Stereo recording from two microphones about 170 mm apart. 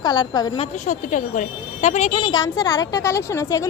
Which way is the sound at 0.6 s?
45° left (ahead or behind).